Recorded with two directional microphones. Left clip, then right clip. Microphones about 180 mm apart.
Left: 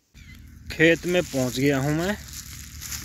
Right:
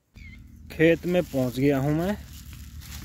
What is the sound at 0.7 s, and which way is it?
Speech, 5° right (ahead or behind).